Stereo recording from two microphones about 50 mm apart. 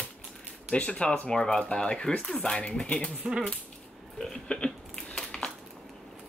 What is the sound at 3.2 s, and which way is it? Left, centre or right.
Speech, centre.